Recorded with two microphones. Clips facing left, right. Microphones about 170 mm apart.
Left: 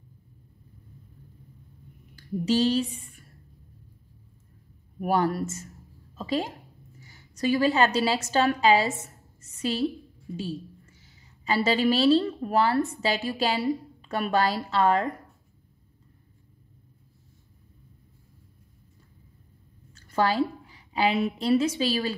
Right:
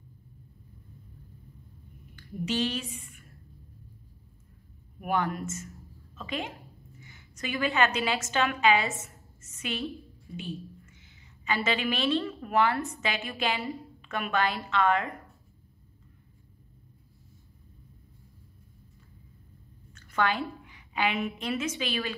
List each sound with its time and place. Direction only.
2.1 s a woman's voice: 35° left (ahead or behind)
5.0 s a woman's voice: 35° left (ahead or behind)
19.9 s a woman's voice: 35° left (ahead or behind)